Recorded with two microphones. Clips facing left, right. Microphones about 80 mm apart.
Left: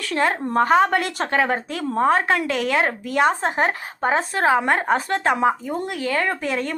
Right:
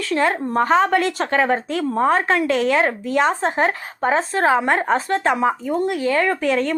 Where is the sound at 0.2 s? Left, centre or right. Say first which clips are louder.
Even; left.